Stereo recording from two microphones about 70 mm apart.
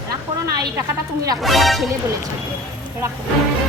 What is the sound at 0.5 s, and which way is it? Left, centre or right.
Speech, right.